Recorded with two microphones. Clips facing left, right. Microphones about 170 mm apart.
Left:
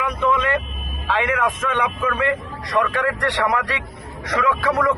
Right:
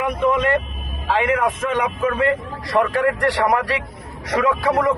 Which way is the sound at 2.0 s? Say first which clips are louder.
Right 3 dB; 30° right (ahead or behind).